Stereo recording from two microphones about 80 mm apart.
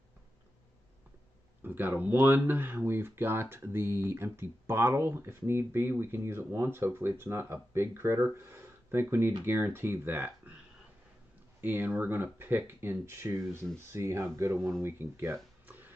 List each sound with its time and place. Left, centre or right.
1.6 s speech: right
11.6 s speech: right
15.6 s a sound: right